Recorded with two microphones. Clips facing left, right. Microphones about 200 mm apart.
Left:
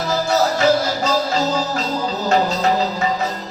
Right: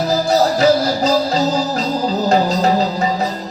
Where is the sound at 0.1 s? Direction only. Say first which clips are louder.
Right 2 dB; 35° right (ahead or behind).